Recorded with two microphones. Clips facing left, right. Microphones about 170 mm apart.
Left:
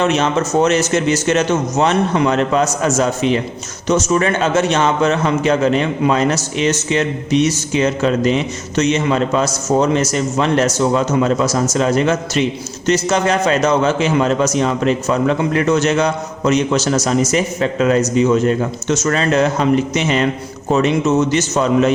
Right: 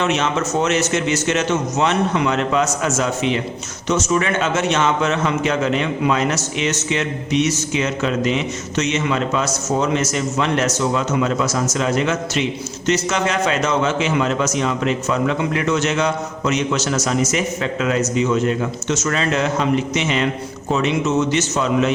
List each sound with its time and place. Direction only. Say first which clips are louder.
0.0 s a man's voice: left 4 dB; 35° left (ahead or behind)